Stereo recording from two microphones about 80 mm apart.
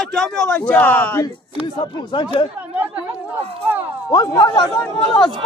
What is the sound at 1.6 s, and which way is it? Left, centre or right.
Speech, left.